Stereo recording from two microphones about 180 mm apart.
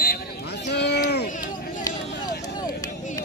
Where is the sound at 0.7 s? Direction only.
70° left (ahead or behind).